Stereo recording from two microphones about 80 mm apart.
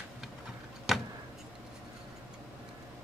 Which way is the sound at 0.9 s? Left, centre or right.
Centre.